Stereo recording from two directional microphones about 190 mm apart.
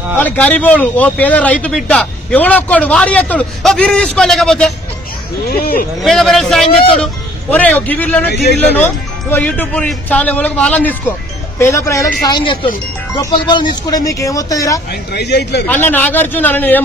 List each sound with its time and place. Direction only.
0.2 s speech: 10° left (ahead or behind)
5.9 s speech: centre (ahead or behind)
8.3 s speech: 60° left (ahead or behind)
8.7 s speech: 10° left (ahead or behind)
14.9 s speech: 60° left (ahead or behind)
15.6 s speech: 10° left (ahead or behind)